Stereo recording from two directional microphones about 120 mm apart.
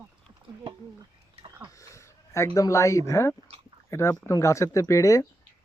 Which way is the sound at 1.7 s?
25° left (ahead or behind).